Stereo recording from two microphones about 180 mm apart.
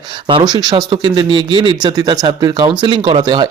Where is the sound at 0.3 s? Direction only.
25° right (ahead or behind).